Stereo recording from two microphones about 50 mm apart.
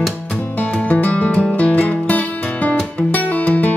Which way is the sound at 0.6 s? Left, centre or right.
Left.